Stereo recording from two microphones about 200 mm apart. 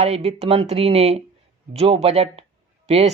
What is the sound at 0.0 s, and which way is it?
Speech, 30° right (ahead or behind).